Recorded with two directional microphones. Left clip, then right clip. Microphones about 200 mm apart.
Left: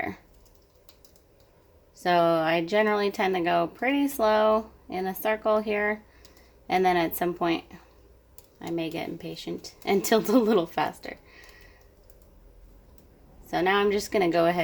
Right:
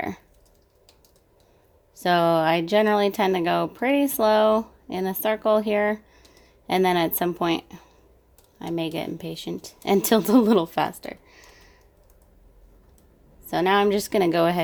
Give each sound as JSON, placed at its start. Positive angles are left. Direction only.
{"t": 2.0, "sound": "a woman's voice", "side_deg": -45}
{"t": 13.5, "sound": "speech", "side_deg": -40}